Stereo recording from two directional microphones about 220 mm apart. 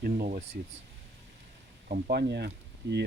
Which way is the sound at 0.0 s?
45° right (ahead or behind).